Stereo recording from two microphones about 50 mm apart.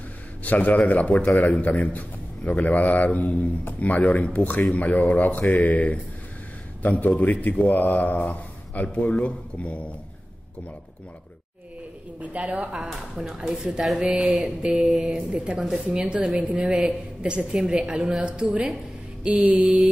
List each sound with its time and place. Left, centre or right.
0.4 s speech: left
12.2 s a woman's voice: right
13.3 s a woman's voice: centre
13.9 s a woman's voice: right
14.8 s a woman's voice: centre
15.3 s a woman's voice: right
16.3 s a woman's voice: right